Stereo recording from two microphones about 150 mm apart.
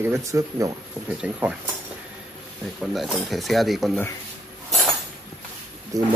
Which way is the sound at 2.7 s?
Centre (ahead or behind).